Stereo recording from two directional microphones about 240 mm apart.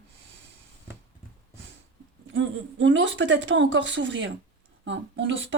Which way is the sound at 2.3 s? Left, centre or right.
Right.